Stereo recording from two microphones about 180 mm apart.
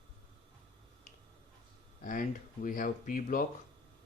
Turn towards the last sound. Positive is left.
turn(degrees=50)  # may be behind; listen again after turning